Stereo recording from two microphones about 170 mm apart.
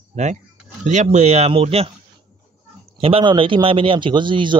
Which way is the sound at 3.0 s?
30° right (ahead or behind).